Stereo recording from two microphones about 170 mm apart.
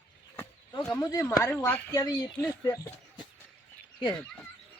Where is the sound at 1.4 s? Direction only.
15° left (ahead or behind).